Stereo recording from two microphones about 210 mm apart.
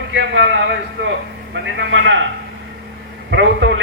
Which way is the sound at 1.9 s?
60° right (ahead or behind).